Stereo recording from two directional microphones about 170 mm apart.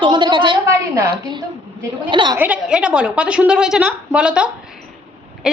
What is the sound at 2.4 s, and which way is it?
A woman's voice, 5° right (ahead or behind).